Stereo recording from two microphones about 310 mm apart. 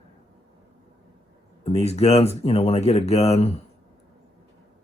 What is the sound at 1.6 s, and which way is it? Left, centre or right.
Speech, left.